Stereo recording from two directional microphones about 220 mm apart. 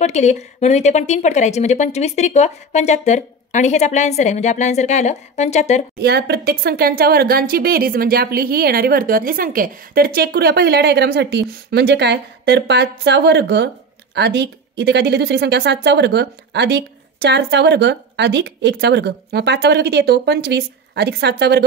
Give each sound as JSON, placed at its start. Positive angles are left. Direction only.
{"t": 0.0, "sound": "a woman's voice", "side_deg": 30}
{"t": 5.9, "sound": "speech", "side_deg": -45}